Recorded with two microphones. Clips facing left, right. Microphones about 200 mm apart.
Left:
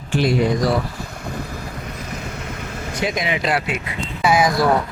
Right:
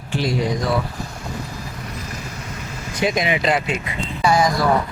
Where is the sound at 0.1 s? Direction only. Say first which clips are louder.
Left 4 dB; 55° left (ahead or behind).